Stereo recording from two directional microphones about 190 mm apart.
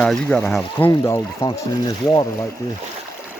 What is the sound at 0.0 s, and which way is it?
Speech, 5° left (ahead or behind).